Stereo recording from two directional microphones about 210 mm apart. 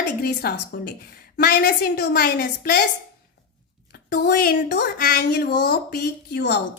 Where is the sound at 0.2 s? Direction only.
50° left (ahead or behind).